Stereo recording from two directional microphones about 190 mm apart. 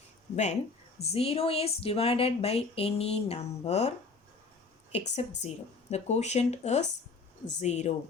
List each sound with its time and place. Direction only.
1.0 s a woman's voice: 30° left (ahead or behind)